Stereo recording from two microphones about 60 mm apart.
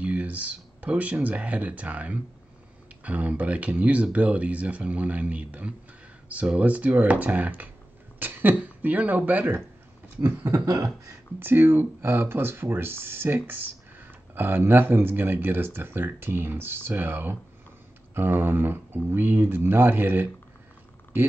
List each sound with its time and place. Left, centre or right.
0.0 s speech: right
10.2 s speech: right
10.6 s beatboxing: right
11.3 s speech: right